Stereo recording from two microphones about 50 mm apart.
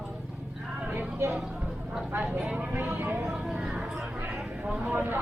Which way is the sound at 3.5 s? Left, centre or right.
Right.